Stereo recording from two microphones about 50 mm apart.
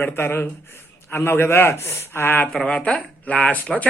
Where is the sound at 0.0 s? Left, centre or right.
Left.